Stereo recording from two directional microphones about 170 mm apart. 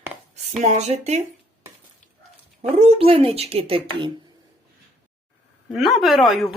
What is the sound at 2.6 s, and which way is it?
Speech, 40° right (ahead or behind).